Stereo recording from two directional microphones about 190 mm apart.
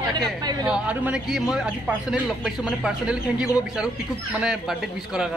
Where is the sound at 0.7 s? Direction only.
5° right (ahead or behind).